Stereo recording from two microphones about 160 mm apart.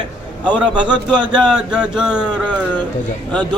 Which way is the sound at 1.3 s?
5° right (ahead or behind).